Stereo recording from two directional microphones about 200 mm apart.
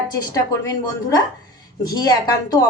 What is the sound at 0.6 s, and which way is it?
A woman's voice, 20° left (ahead or behind).